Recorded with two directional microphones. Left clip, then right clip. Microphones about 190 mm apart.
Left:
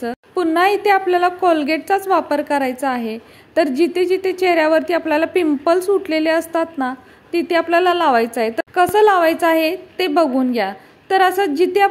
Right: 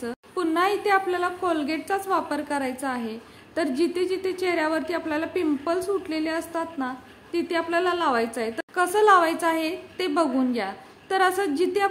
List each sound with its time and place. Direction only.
0.0 s a woman's voice: 30° left (ahead or behind)